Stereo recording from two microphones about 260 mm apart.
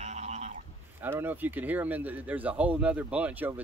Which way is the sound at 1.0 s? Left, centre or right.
Centre.